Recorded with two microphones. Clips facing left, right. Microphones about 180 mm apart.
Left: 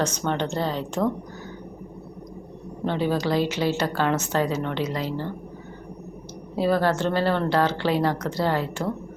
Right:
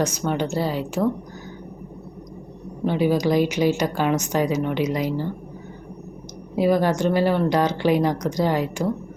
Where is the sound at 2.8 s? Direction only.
10° right (ahead or behind).